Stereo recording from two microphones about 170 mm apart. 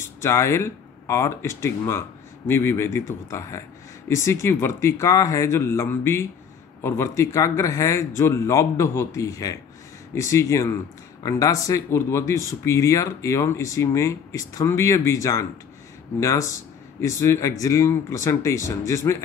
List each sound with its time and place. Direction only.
0.2 s speech: 15° left (ahead or behind)